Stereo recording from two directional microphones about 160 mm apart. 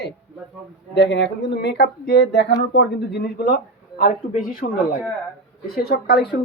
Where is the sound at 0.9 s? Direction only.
90° left; by 3.6 s 75° left (ahead or behind).